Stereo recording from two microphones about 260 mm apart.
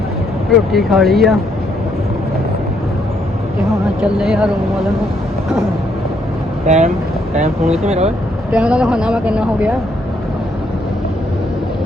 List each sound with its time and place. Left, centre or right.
0.7 s speech: centre
4.2 s speech: centre
6.7 s speech: right
8.5 s speech: centre